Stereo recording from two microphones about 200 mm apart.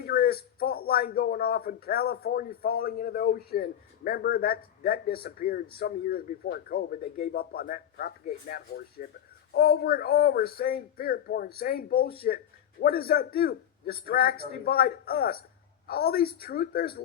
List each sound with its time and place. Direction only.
0.0 s a man's voice: 50° left (ahead or behind)